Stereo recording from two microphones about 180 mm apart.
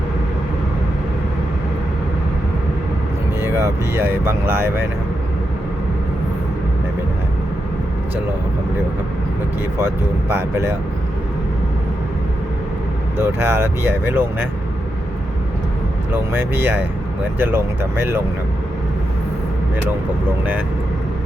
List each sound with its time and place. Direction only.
3.4 s speech: 15° right (ahead or behind)
9.7 s speech: 15° right (ahead or behind)
13.1 s speech: 15° right (ahead or behind)
16.1 s speech: 10° right (ahead or behind)